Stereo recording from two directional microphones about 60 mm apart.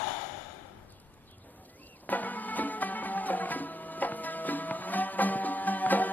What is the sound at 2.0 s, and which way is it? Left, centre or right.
Music, left.